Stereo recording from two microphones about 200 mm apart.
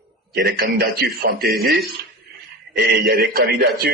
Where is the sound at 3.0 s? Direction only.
50° right (ahead or behind).